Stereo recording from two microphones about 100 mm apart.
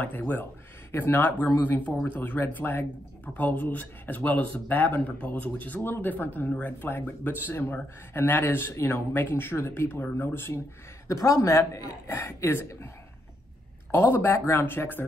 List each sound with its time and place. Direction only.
0.0 s speech: 15° left (ahead or behind)
13.9 s speech: 25° left (ahead or behind)